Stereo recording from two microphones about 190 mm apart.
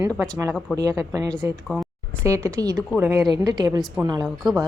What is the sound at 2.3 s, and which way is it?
A woman's voice, 15° right (ahead or behind).